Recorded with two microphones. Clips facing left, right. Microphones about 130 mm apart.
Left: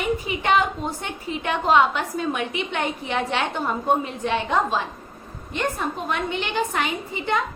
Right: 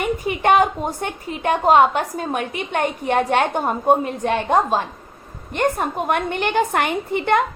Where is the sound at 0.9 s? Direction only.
50° right (ahead or behind).